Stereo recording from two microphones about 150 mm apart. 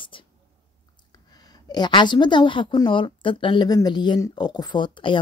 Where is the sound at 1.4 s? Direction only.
25° left (ahead or behind).